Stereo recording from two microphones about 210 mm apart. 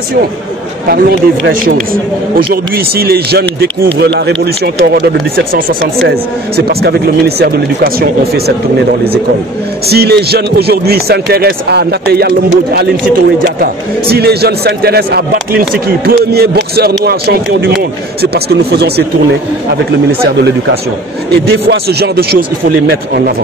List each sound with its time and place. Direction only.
0.8 s a man's voice: 45° right (ahead or behind)
5.4 s a man's voice: 45° right (ahead or behind)
9.8 s a man's voice: 50° right (ahead or behind)
21.5 s a man's voice: 50° right (ahead or behind)